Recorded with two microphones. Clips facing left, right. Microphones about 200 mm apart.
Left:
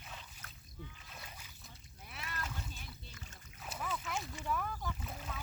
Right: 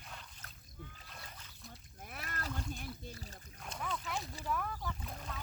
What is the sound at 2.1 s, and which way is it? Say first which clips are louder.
Splash: right 1 dB; 50° right (ahead or behind).